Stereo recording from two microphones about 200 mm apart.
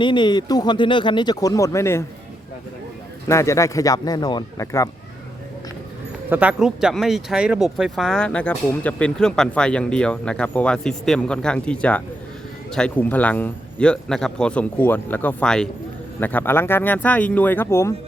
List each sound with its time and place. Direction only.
0.0 s speech: 25° left (ahead or behind)
3.2 s speech: 15° left (ahead or behind)
6.3 s speech: 5° right (ahead or behind); by 17.9 s 15° left (ahead or behind)